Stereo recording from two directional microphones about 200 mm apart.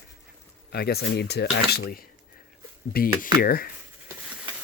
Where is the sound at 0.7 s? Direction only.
50° left (ahead or behind).